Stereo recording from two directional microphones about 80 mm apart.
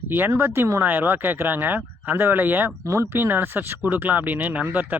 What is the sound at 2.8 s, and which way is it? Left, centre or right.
Speech, right.